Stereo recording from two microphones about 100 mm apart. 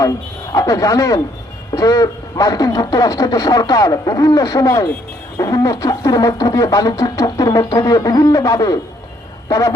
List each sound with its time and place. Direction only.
0.5 s speech: 35° left (ahead or behind)